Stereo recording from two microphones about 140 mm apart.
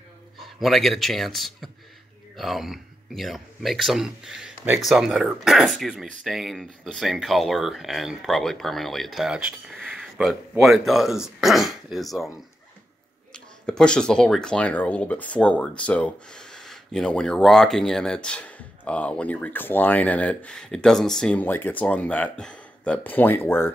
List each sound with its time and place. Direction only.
0.4 s speech: centre (ahead or behind)
13.3 s speech: 5° left (ahead or behind)